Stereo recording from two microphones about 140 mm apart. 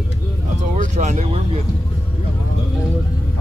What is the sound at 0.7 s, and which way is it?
Speech, 55° right (ahead or behind).